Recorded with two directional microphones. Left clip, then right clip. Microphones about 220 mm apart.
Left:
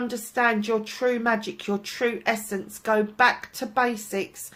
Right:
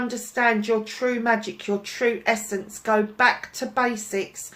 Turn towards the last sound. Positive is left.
turn(degrees=40)  # may be behind; listen again after turning